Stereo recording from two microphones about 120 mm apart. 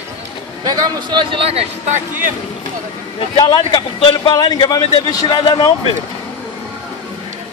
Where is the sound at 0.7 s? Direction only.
35° right (ahead or behind); by 1.7 s 55° right (ahead or behind).